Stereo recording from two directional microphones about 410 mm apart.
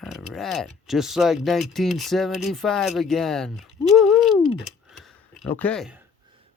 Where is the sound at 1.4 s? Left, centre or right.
Centre.